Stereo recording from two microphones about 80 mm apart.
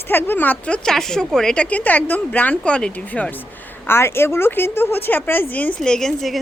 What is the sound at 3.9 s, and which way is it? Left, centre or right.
Speech, left.